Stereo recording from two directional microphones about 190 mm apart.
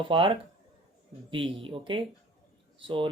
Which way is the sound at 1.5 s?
25° right (ahead or behind).